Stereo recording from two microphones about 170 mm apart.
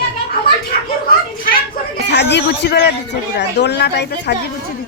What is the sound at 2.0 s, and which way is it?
A man's voice, 85° left.